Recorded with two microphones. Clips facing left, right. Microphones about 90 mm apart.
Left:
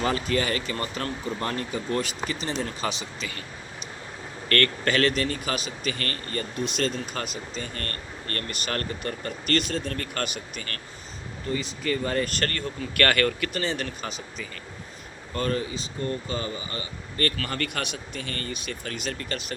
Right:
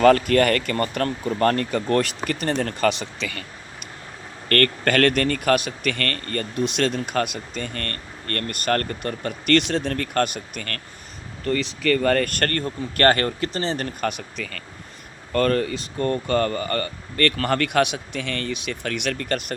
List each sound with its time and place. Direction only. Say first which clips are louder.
0.0 s speech: right 10 dB; 65° right (ahead or behind)
4.4 s speech: right 4 dB; 45° right (ahead or behind)
11.4 s speech: right 7 dB; 75° right (ahead or behind); by 12.7 s 50° right (ahead or behind)
13.0 s speech: right 4 dB; 30° right (ahead or behind)
14.0 s speech: right 8 dB; 65° right (ahead or behind); by 14.6 s 80° right
15.3 s speech: right 7 dB; 65° right (ahead or behind)